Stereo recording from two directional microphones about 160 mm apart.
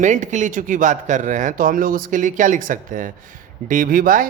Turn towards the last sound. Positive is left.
turn(degrees=-60)  # may be behind; listen again after turning